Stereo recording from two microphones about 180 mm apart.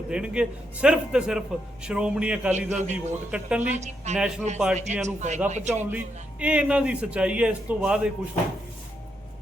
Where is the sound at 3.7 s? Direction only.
40° right (ahead or behind).